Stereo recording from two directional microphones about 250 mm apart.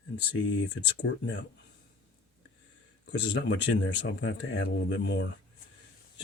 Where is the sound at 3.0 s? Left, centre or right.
Left.